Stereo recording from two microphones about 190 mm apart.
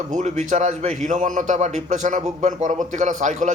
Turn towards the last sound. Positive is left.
turn(degrees=-40)  # may be behind; listen again after turning